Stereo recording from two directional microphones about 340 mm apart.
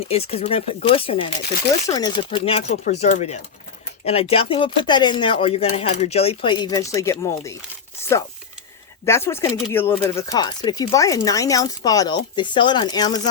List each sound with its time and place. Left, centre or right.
0.0 s speech: centre
9.0 s speech: centre